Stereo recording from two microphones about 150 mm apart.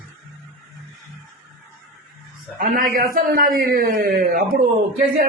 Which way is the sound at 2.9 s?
75° right (ahead or behind).